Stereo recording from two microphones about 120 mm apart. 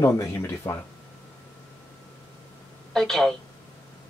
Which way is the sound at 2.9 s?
5° left (ahead or behind).